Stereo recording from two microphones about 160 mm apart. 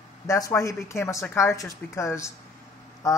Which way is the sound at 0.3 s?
20° left (ahead or behind).